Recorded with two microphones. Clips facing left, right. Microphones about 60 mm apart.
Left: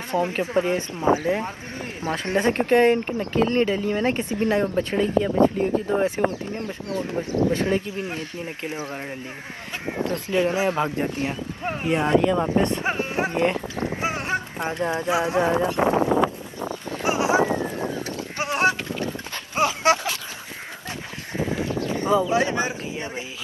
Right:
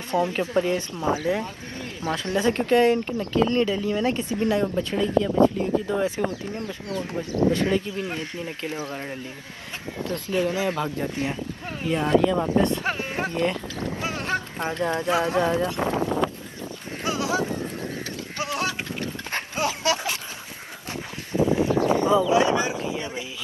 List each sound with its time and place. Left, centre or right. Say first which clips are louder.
0.1 s speech: even; left
10.0 s speech: left 2 dB; left
13.3 s speech: left 3 dB; left
17.0 s a sound: left 5 dB; left
18.0 s clip-clop: left 2 dB; left
19.5 s dog: left 6 dB; left
21.5 s a sound: right 5 dB; right
22.0 s speech: left 2 dB; left